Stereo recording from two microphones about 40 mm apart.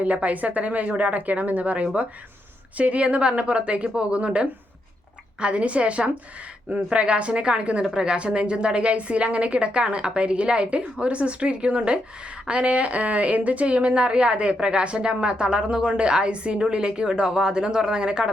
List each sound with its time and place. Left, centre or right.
0.0 s a woman's voice: right